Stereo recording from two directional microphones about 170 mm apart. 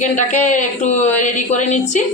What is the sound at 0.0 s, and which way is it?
A woman's voice, 45° left (ahead or behind).